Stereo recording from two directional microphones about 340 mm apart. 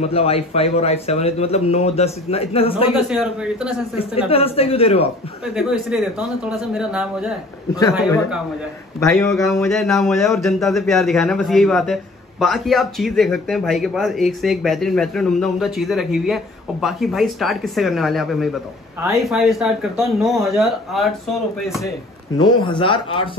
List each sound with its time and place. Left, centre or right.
0.0 s a man's voice: centre
3.0 s speech: centre
4.3 s a man's voice: centre
5.6 s speech: centre
9.0 s a man's voice: centre